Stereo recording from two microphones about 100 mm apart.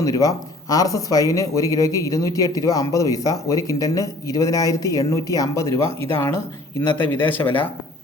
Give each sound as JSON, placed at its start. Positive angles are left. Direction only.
{"t": 0.0, "sound": "speech", "side_deg": 35}